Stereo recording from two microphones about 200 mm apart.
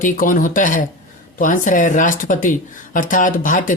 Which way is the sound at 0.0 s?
45° left (ahead or behind).